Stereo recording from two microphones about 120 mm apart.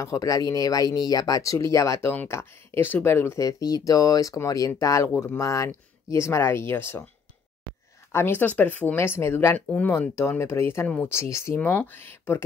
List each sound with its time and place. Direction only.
0.0 s speech: 25° left (ahead or behind)
8.1 s speech: 15° left (ahead or behind)
11.6 s speech: 10° left (ahead or behind)